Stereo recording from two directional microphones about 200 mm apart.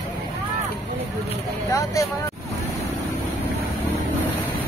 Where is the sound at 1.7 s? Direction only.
15° left (ahead or behind).